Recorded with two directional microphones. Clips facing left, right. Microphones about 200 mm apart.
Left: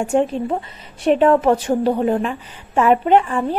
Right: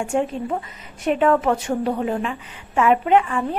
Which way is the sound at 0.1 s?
35° left (ahead or behind).